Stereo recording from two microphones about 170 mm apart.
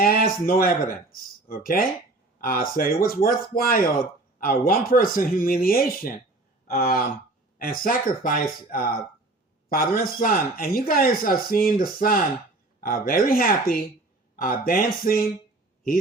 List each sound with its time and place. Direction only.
0.0 s speech: 60° left (ahead or behind)